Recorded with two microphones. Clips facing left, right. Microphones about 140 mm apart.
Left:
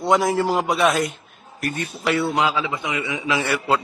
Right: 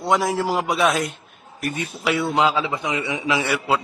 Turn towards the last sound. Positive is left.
turn(degrees=-5)  # may be behind; listen again after turning